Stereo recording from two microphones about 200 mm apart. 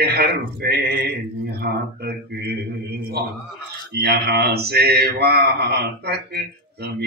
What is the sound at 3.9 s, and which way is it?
Speech, 50° right (ahead or behind).